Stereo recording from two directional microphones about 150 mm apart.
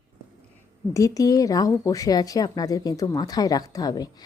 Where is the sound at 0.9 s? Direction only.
20° left (ahead or behind).